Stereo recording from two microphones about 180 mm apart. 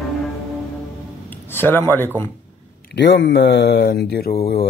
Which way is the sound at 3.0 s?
80° left.